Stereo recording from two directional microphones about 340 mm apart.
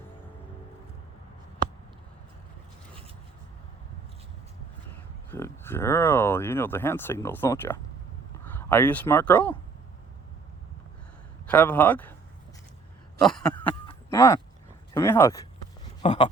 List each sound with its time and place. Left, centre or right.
5.3 s speech: centre
11.4 s a man's voice: centre
13.2 s a man's voice: centre
13.8 s a sound: centre
14.9 s speech: centre
16.0 s speech: centre